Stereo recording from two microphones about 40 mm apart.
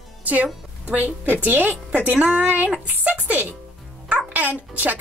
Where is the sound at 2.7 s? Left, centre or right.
Right.